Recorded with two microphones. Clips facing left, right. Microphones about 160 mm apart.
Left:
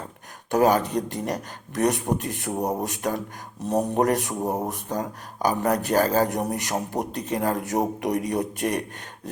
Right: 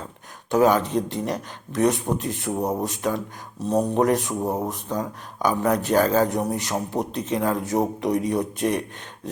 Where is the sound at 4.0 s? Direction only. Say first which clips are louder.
Right 2 dB; 50° left (ahead or behind).